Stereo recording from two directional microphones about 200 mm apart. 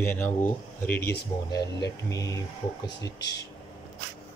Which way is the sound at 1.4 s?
20° left (ahead or behind).